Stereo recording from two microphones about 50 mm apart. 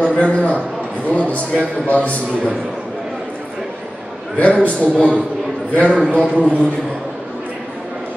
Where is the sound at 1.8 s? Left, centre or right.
Left.